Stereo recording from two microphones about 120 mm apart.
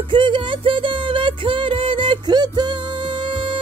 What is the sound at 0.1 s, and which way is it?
Music, 40° right (ahead or behind).